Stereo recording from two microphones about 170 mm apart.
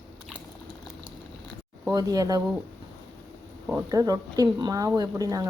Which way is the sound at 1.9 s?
20° right (ahead or behind).